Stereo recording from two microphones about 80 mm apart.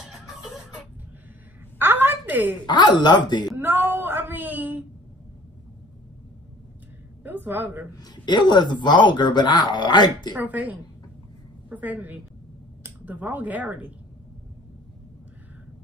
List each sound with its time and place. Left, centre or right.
1.8 s a sound: right
2.6 s speech: left
3.5 s a sound: right
7.2 s a woman's voice: right
8.0 s speech: left
10.3 s a woman's voice: right